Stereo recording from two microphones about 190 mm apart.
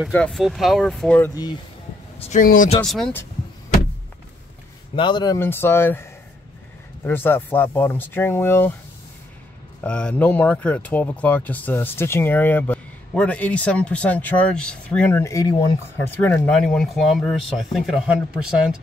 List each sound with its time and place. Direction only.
0.1 s speech: 5° left (ahead or behind); by 1.6 s 20° left (ahead or behind)
2.1 s speech: 35° left (ahead or behind)
2.8 s speech: 5° left (ahead or behind)
4.9 s speech: 25° left (ahead or behind)
7.1 s speech: 10° left (ahead or behind)
9.8 s speech: 5° left (ahead or behind)